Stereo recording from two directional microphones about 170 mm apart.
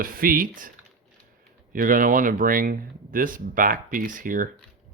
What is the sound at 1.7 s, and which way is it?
Speech, 55° right (ahead or behind).